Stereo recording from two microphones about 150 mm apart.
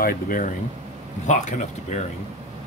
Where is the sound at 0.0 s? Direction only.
65° left (ahead or behind).